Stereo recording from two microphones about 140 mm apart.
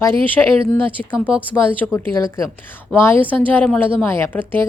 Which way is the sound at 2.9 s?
15° left (ahead or behind).